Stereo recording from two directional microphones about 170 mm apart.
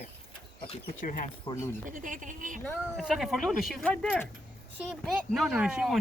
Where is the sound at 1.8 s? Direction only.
50° right (ahead or behind).